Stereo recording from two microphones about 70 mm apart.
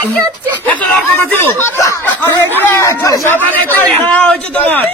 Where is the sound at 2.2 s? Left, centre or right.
Left.